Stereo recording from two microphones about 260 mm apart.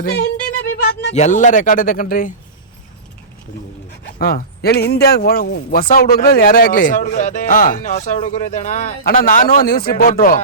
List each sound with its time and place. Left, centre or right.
0.0 s a man's voice: left
4.2 s a man's voice: left